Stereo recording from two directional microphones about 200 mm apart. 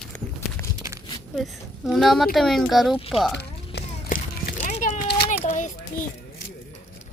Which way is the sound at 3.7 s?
45° left (ahead or behind).